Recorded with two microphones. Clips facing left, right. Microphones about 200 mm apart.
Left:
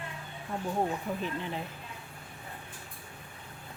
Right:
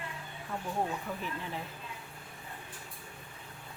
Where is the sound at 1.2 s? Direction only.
20° left (ahead or behind).